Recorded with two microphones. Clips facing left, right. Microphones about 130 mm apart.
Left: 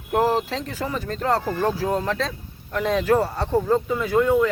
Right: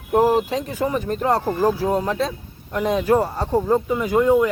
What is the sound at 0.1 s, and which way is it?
Speech, 15° right (ahead or behind).